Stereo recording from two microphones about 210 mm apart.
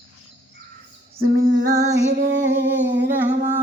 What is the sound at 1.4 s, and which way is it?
Female singing, 60° right (ahead or behind).